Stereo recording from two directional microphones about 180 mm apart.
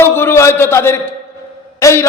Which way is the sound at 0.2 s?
15° left (ahead or behind).